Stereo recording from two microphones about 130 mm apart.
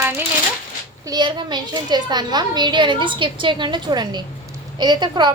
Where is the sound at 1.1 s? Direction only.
35° right (ahead or behind).